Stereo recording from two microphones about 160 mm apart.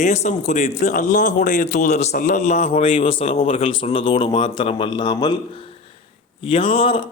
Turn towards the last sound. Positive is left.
turn(degrees=35)  # may be behind; listen again after turning